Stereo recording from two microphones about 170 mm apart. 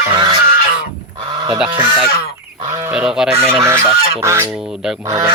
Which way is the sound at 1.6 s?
5° right (ahead or behind).